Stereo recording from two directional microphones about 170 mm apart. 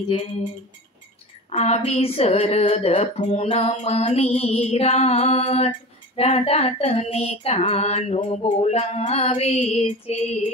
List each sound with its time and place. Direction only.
1.5 s female singing: 40° left (ahead or behind)